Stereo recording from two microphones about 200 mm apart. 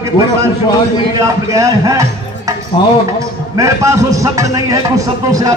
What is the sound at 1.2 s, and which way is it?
Speech, 15° right (ahead or behind).